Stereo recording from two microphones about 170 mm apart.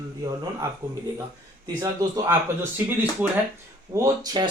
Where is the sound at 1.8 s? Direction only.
20° right (ahead or behind).